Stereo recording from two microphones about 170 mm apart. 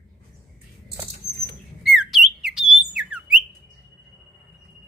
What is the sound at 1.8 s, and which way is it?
Squawk, centre (ahead or behind).